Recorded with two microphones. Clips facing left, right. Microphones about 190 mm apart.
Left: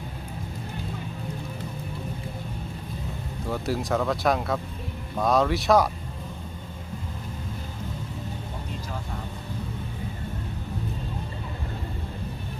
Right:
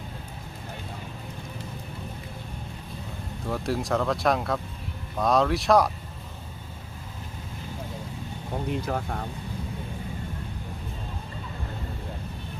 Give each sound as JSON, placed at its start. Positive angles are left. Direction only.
{"t": 3.4, "sound": "speech", "side_deg": 0}
{"t": 8.7, "sound": "speech", "side_deg": -60}